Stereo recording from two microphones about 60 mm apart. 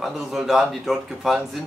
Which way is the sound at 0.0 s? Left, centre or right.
Centre.